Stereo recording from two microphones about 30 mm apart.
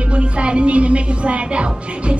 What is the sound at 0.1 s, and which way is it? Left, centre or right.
A woman's voice, right.